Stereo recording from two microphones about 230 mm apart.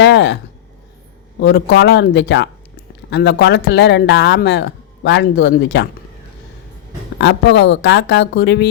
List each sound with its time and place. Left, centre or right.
0.0 s a sound: left
1.4 s speech: left
7.2 s speech: left